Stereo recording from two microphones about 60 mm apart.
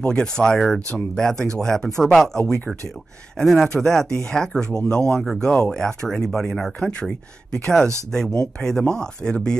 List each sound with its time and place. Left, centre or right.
0.0 s speech: centre
6.8 s speech: centre